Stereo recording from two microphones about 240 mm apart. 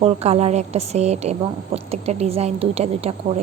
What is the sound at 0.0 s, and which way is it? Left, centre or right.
A woman's voice, right.